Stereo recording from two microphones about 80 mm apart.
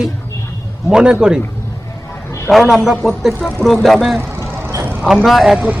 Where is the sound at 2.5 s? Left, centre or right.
Centre.